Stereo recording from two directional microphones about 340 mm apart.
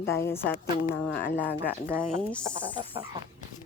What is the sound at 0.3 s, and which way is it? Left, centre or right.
Speech, centre.